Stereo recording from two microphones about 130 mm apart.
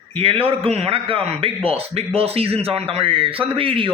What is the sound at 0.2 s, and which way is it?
A man's voice, 45° right (ahead or behind).